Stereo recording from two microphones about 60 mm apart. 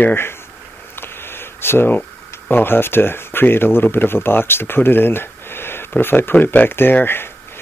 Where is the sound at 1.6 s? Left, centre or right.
Left.